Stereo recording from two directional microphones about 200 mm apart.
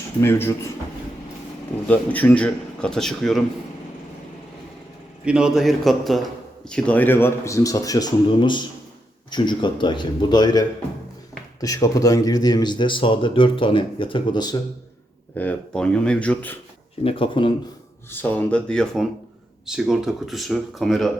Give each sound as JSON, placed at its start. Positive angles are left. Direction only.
{"t": 0.2, "sound": "a man's voice", "side_deg": 10}
{"t": 1.9, "sound": "a man's voice", "side_deg": 10}
{"t": 5.2, "sound": "a man's voice", "side_deg": -5}
{"t": 15.4, "sound": "a man's voice", "side_deg": 5}
{"t": 17.0, "sound": "speech", "side_deg": 25}
{"t": 18.1, "sound": "a man's voice", "side_deg": 10}